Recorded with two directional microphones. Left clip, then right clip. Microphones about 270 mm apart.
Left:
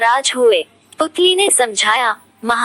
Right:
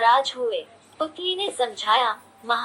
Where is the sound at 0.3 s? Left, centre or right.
Left.